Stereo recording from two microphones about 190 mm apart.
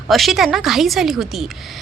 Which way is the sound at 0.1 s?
Centre (ahead or behind).